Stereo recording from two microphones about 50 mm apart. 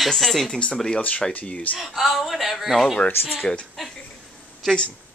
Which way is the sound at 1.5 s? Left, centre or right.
Left.